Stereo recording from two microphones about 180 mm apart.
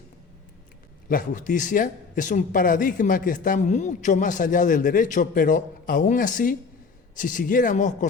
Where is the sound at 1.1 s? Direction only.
45° left (ahead or behind).